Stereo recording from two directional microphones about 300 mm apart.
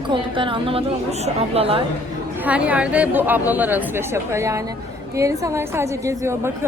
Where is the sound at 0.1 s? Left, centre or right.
Centre.